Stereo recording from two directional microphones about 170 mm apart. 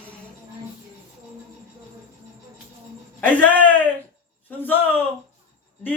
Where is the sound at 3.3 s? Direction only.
10° left (ahead or behind).